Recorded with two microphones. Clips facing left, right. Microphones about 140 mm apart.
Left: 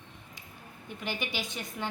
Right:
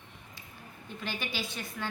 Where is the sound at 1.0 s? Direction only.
15° left (ahead or behind).